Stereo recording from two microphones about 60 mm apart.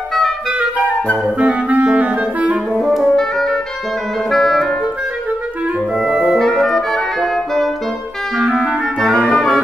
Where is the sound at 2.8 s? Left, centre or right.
Centre.